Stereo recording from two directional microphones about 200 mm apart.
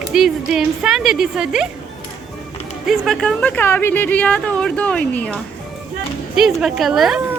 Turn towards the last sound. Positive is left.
turn(degrees=0)  # may be behind; listen again after turning